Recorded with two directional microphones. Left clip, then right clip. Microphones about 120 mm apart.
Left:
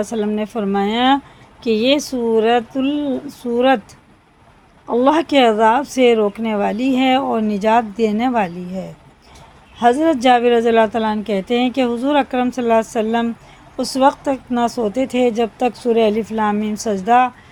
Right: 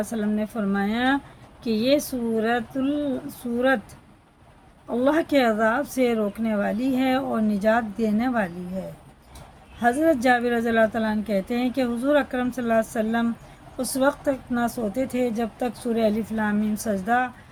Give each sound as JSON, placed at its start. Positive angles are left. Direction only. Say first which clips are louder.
{"t": 0.0, "sound": "speech", "louder": "left 7 dB", "side_deg": 35}
{"t": 4.9, "sound": "speech", "louder": "left 7 dB", "side_deg": 35}